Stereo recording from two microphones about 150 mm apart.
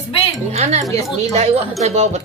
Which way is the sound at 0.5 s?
45° right (ahead or behind).